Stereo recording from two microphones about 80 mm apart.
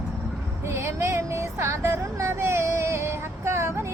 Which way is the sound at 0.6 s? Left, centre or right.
Right.